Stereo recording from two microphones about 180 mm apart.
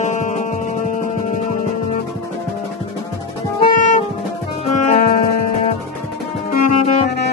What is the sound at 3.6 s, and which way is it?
Music, 50° left (ahead or behind).